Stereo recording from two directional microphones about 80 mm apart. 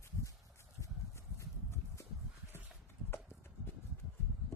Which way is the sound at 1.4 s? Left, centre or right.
Left.